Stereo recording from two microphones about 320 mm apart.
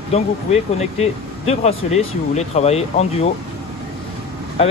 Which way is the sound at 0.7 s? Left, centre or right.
Centre.